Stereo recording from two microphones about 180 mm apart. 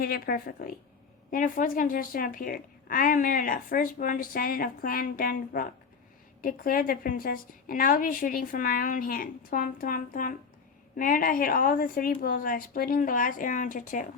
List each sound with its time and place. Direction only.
0.0 s a woman's voice: 55° left (ahead or behind)